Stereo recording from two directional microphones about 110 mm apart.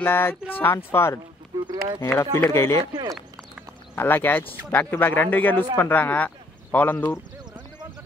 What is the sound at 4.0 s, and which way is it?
Speech, 20° left (ahead or behind).